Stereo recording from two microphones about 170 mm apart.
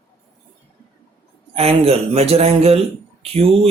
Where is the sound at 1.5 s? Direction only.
35° right (ahead or behind).